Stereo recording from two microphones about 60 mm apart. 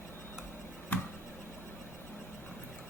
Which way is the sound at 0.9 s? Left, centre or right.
Left.